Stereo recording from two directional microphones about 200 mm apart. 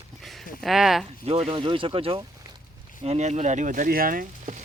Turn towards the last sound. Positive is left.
turn(degrees=-40)  # may be behind; listen again after turning